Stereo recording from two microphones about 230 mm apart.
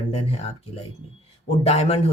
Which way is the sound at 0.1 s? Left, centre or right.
Left.